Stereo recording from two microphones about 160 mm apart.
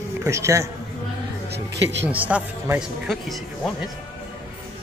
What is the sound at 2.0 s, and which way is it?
Speech, 10° right (ahead or behind).